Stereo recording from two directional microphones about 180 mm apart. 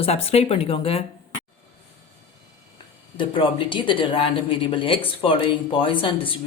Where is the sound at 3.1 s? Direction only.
25° left (ahead or behind).